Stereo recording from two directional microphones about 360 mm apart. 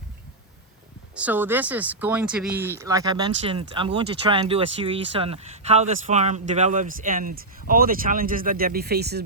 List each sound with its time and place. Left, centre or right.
1.1 s speech: centre; by 9.2 s right